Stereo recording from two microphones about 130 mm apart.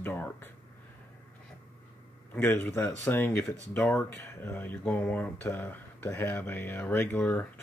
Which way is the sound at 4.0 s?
15° left (ahead or behind).